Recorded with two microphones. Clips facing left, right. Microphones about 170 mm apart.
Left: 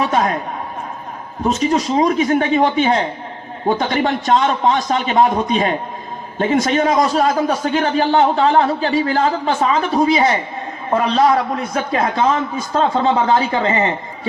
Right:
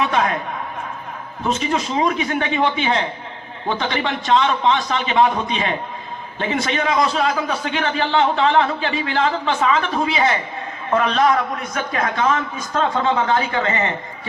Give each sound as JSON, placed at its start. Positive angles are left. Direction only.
{"t": 0.0, "sound": "a man's voice", "side_deg": 35}
{"t": 1.5, "sound": "a man's voice", "side_deg": 40}